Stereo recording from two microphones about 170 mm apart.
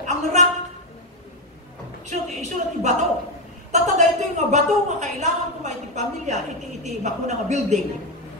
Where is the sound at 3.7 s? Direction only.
45° right (ahead or behind).